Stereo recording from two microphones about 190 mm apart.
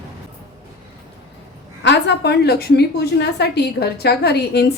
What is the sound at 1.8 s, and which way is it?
A woman's voice, 65° left (ahead or behind).